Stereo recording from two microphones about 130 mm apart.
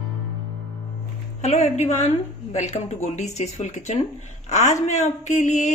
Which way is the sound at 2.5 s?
65° left (ahead or behind).